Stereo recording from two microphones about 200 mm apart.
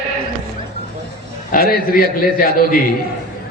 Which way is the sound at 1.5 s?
50° left (ahead or behind).